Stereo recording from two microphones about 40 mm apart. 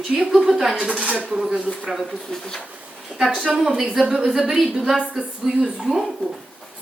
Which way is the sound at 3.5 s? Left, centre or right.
Centre.